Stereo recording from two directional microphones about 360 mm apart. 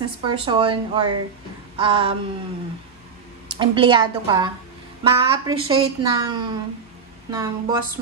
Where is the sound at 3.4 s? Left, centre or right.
Centre.